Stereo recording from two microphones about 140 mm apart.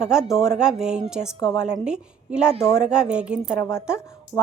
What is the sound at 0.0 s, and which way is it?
A woman's voice, 5° right (ahead or behind).